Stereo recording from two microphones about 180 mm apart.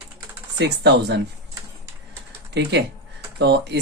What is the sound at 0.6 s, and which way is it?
Speech, 70° right (ahead or behind).